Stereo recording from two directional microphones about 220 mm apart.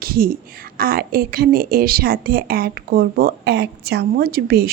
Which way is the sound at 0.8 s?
40° right (ahead or behind).